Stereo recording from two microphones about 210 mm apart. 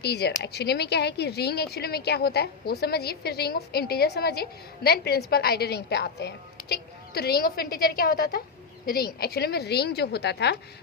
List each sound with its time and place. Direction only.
0.0 s a woman's voice: 50° left (ahead or behind)